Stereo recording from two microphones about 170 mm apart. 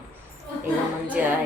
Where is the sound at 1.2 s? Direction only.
10° right (ahead or behind).